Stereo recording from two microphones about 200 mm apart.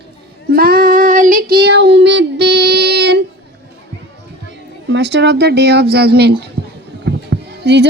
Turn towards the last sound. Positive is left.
turn(degrees=-55)  # may be behind; listen again after turning